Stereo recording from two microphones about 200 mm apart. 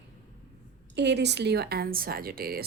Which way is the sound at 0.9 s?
60° right (ahead or behind).